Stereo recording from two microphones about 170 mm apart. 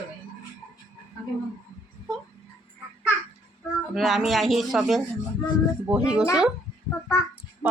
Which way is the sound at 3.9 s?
Centre (ahead or behind).